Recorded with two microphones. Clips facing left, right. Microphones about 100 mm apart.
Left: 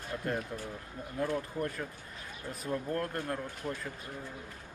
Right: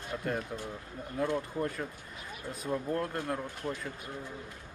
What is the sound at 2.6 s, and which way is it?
Speech, 10° right (ahead or behind).